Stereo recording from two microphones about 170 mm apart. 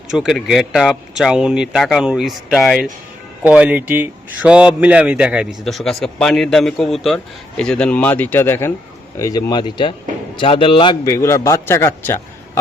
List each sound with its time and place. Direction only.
0.1 s a man's voice: centre (ahead or behind); by 12.2 s 15° left (ahead or behind)